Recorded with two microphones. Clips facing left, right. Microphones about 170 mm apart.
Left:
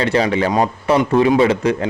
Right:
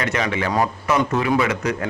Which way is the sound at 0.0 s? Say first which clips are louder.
Left 6 dB; 30° left (ahead or behind).